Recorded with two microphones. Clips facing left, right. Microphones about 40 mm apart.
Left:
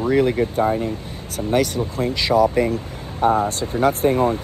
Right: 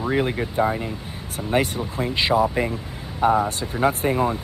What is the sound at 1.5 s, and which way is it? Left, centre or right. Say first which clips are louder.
Speech: left 2 dB; right.